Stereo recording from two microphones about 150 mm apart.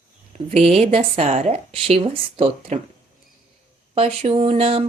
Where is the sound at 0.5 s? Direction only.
45° right (ahead or behind).